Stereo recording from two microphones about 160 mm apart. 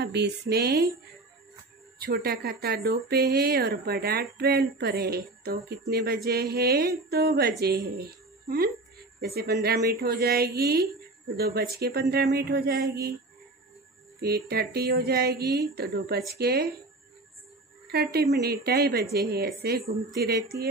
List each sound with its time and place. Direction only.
0.0 s a woman's voice: 90° right
2.0 s a woman's voice: 75° right (ahead or behind)
14.2 s a woman's voice: 80° right
15.4 s speech: 20° right (ahead or behind)
16.3 s a woman's voice: 80° right
17.9 s a woman's voice: 90° right